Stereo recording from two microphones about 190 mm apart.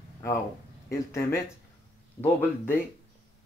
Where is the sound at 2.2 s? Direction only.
10° left (ahead or behind).